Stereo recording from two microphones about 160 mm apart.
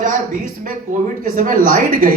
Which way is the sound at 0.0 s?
55° right (ahead or behind).